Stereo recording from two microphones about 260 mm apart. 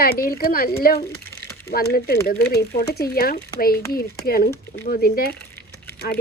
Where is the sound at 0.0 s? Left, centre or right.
Left.